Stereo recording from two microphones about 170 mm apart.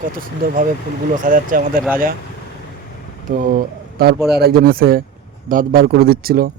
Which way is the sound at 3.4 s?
55° right (ahead or behind).